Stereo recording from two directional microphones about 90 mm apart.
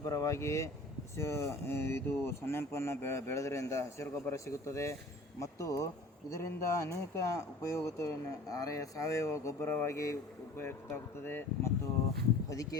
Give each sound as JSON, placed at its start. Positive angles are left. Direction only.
{"t": 0.0, "sound": "speech", "side_deg": 40}
{"t": 10.6, "sound": "speech", "side_deg": 25}